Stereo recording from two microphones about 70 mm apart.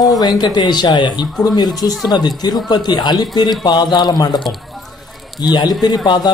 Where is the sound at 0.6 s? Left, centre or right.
Left.